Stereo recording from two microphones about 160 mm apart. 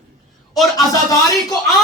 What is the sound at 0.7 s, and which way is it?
Speech, 20° left (ahead or behind).